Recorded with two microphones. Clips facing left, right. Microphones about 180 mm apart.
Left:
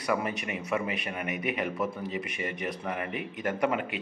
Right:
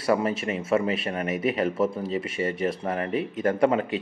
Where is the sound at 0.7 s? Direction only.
35° right (ahead or behind).